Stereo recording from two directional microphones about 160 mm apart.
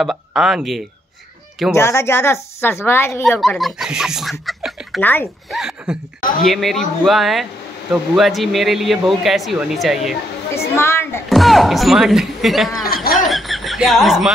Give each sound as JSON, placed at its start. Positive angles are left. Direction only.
{"t": 0.0, "sound": "speech", "side_deg": 0}
{"t": 1.7, "sound": "speech", "side_deg": 20}
{"t": 3.3, "sound": "speech", "side_deg": 0}
{"t": 5.0, "sound": "speech", "side_deg": 10}
{"t": 5.5, "sound": "speech", "side_deg": -5}
{"t": 10.8, "sound": "a sound", "side_deg": 15}
{"t": 11.2, "sound": "speech", "side_deg": 0}
{"t": 13.1, "sound": "snicker", "side_deg": 0}